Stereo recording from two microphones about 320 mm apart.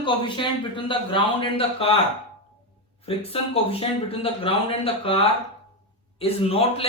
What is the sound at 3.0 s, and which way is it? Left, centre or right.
Speech, centre.